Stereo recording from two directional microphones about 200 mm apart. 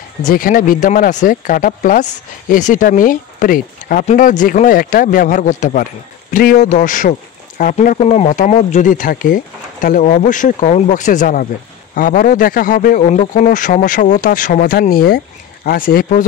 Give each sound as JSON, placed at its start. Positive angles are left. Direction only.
{"t": 0.2, "sound": "a man's voice", "side_deg": 45}